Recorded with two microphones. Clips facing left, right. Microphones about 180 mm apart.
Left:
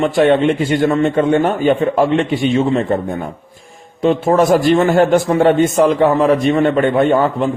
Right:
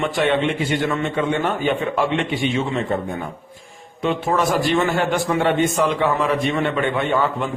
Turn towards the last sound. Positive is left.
turn(degrees=40)  # may be behind; listen again after turning